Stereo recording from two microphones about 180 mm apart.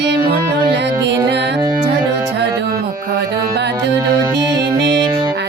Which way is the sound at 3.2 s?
70° right (ahead or behind).